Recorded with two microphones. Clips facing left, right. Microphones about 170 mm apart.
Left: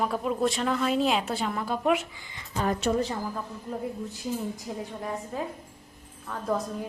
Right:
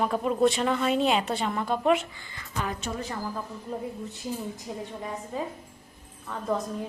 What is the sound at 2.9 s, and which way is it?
Speech, 55° left (ahead or behind).